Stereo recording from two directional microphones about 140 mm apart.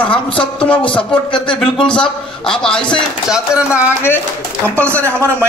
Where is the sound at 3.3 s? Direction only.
5° right (ahead or behind).